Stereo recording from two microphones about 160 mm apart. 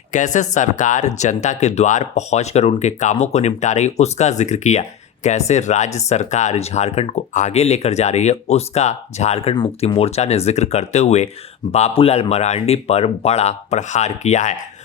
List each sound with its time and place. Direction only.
0.1 s speech: 50° left (ahead or behind)